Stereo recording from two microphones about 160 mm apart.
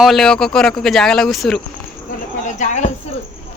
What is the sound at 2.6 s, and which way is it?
Speech, 50° left (ahead or behind).